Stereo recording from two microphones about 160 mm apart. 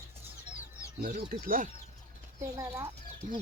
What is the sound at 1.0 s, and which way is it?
Speech, 65° right (ahead or behind).